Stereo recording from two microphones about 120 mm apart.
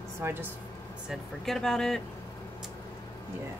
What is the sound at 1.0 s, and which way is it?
Speech, centre (ahead or behind).